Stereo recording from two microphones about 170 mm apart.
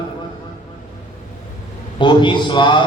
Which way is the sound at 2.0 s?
25° left (ahead or behind).